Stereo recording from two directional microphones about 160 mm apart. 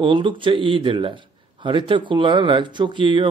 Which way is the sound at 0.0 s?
30° right (ahead or behind).